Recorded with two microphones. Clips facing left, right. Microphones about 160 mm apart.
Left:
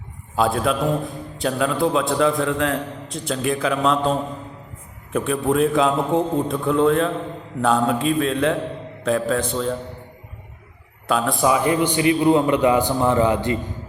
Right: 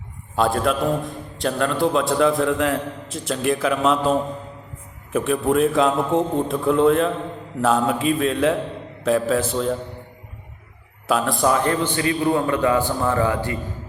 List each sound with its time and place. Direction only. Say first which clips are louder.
0.3 s a man's voice: even; centre (ahead or behind)
5.1 s a man's voice: right 1 dB; centre (ahead or behind)
11.1 s a man's voice: even; centre (ahead or behind); by 13.6 s 20° left (ahead or behind)